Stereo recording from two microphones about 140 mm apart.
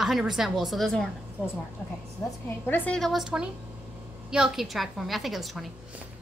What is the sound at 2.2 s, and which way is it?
A woman's voice, 15° left (ahead or behind).